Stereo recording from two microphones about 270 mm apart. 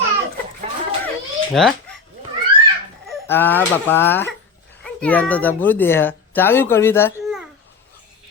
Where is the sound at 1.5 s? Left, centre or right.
Centre.